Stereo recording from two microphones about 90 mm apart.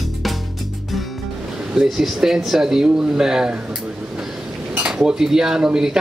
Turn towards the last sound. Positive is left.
turn(degrees=-10)  # may be behind; listen again after turning